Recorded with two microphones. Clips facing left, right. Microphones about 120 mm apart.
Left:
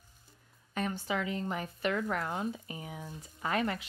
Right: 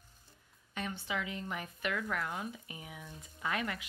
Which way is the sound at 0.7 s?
40° left (ahead or behind).